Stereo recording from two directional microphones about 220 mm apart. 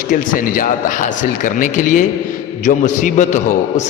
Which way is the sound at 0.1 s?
40° left (ahead or behind).